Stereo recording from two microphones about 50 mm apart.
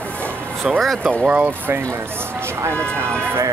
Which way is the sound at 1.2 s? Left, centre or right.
Right.